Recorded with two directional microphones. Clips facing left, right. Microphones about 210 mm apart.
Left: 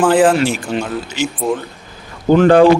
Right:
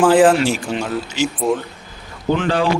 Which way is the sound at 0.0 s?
Centre (ahead or behind).